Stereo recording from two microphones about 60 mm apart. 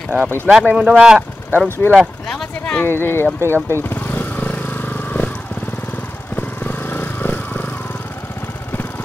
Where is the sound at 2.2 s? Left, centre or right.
Centre.